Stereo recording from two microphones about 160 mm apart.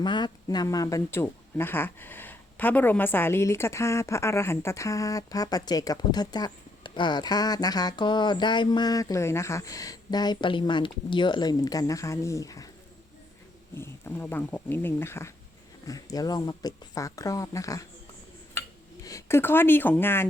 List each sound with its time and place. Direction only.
0.0 s speech: 30° left (ahead or behind)
13.7 s speech: 15° left (ahead or behind)
19.0 s speech: 20° left (ahead or behind)